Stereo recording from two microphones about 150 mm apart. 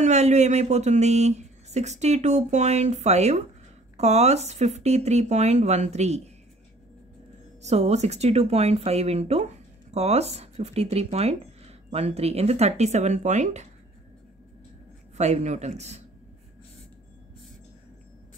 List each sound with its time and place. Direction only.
0.0 s speech: 50° right (ahead or behind)
7.6 s speech: 45° right (ahead or behind)
15.1 s speech: 50° right (ahead or behind)